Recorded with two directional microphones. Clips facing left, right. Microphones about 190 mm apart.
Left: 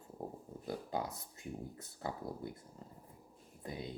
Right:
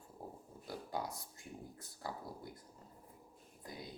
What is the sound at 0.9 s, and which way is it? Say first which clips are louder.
Speech: left 3 dB; 20° left (ahead or behind).